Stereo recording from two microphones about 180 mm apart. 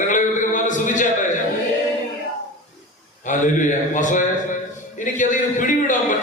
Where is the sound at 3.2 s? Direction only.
45° left (ahead or behind).